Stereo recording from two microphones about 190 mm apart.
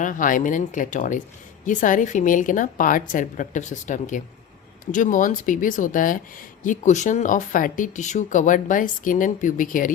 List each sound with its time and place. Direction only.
0.0 s speech: 45° left (ahead or behind)